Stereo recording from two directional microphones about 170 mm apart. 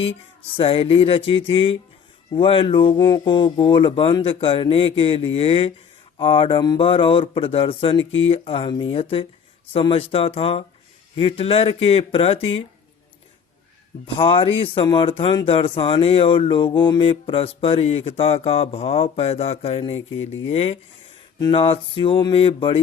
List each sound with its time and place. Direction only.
0.5 s speech: 35° left (ahead or behind)
14.2 s speech: 30° left (ahead or behind)